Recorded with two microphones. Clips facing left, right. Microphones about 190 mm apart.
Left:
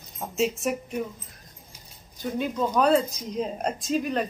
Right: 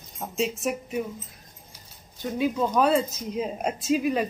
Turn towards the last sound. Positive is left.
turn(degrees=-5)  # may be behind; listen again after turning